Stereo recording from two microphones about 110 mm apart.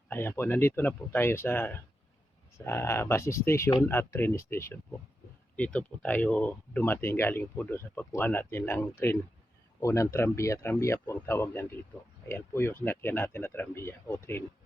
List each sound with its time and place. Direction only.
0.1 s speech: 20° left (ahead or behind)